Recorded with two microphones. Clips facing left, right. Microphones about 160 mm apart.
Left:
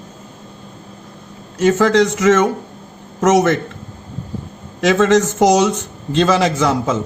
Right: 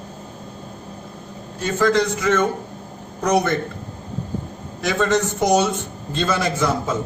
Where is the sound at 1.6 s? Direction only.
85° left.